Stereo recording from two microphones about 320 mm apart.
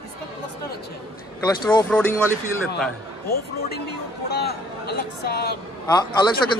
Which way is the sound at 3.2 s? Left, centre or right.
Left.